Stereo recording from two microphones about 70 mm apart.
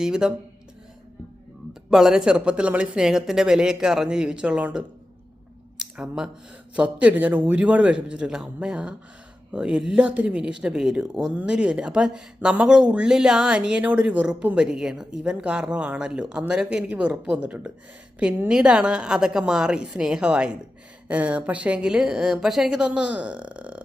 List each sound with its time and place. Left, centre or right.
0.0 s speech: centre
1.9 s speech: centre
6.0 s a man's voice: centre